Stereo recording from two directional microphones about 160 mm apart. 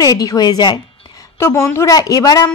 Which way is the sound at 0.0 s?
20° left (ahead or behind).